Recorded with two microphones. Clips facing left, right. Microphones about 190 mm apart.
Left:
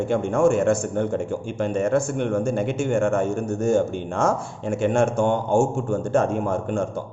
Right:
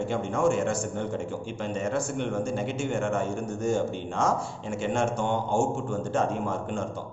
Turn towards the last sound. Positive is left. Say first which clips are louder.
# left 6 dB
turn(degrees=50)  # may be behind; listen again after turning